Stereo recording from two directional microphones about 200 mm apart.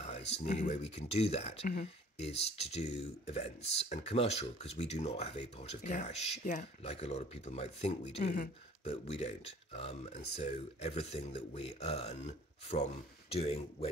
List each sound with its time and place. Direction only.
0.4 s speech: 35° left (ahead or behind)